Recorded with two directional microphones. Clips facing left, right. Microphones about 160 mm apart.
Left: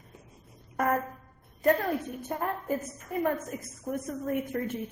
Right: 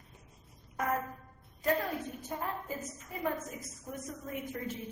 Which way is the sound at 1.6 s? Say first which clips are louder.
Left 6 dB; 60° left (ahead or behind).